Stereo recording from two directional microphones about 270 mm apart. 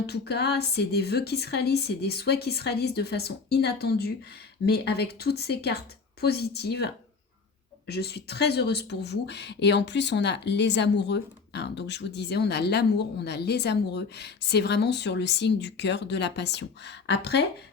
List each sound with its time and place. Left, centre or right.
0.0 s speech: left